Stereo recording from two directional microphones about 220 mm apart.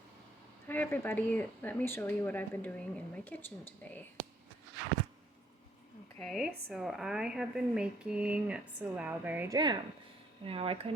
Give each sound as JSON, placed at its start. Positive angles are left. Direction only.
{"t": 0.7, "sound": "speech", "side_deg": 10}
{"t": 6.1, "sound": "speech", "side_deg": 0}